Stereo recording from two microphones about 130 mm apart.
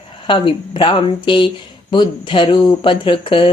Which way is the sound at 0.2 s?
40° left (ahead or behind).